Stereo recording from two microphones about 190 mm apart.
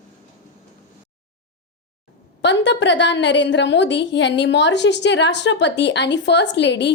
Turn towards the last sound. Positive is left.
turn(degrees=70)  # may be behind; listen again after turning